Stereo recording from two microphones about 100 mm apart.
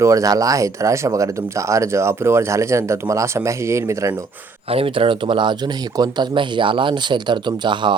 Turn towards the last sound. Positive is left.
turn(degrees=-50)  # may be behind; listen again after turning